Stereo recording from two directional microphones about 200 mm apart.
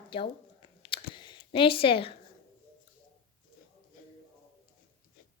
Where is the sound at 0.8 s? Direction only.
25° left (ahead or behind).